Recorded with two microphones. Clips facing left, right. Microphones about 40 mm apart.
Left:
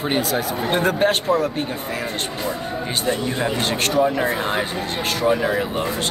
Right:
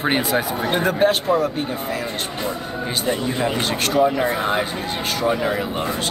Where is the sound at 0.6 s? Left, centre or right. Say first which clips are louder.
Left 2 dB; centre.